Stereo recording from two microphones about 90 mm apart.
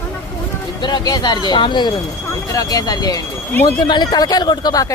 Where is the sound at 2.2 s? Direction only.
35° left (ahead or behind).